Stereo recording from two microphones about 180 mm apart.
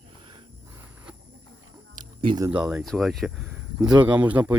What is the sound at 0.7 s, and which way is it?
Cricket, 10° right (ahead or behind).